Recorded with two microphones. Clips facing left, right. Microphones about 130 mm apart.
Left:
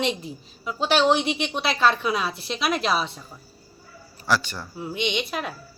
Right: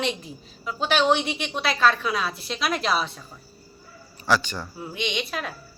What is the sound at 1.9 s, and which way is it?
Speech, 20° left (ahead or behind).